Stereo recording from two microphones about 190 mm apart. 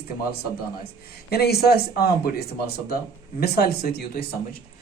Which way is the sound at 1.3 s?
55° left (ahead or behind).